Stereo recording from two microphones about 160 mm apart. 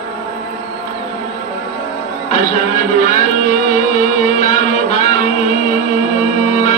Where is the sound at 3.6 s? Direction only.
55° left (ahead or behind).